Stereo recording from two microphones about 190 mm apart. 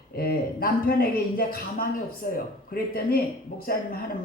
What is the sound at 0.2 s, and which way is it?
A woman's voice, 50° left (ahead or behind).